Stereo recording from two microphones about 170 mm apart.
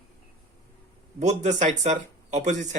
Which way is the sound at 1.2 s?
40° right (ahead or behind).